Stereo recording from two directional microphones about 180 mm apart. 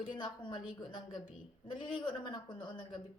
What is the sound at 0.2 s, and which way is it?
A woman's voice, 25° left (ahead or behind).